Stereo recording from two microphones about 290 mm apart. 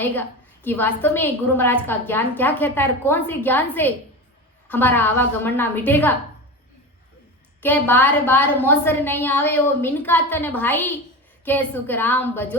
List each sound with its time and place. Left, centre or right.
0.0 s a woman's voice: centre
7.6 s a woman's voice: centre